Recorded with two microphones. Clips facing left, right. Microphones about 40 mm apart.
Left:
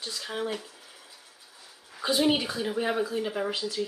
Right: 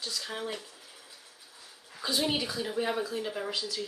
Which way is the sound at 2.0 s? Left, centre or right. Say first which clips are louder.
Left 5 dB; centre.